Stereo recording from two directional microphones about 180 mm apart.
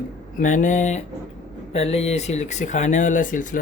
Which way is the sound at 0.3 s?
45° left (ahead or behind).